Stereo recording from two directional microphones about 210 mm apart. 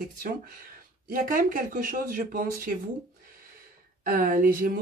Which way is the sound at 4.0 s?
45° right (ahead or behind).